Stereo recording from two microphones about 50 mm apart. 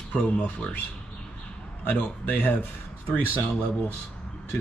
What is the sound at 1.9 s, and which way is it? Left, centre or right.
Speech, left.